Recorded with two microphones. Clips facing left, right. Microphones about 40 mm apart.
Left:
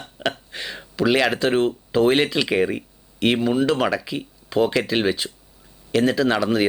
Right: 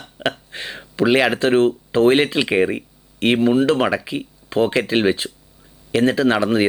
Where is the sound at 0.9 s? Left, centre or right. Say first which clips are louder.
Right 3 dB; centre.